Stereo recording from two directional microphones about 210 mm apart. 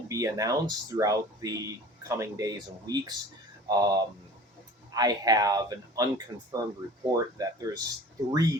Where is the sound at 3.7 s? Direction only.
20° right (ahead or behind).